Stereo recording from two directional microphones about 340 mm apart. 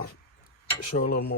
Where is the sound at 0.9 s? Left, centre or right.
Left.